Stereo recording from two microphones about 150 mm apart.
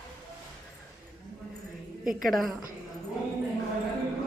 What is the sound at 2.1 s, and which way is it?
Speech, centre (ahead or behind).